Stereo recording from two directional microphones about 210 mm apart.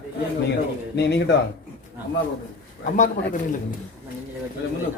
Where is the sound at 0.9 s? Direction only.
55° left (ahead or behind).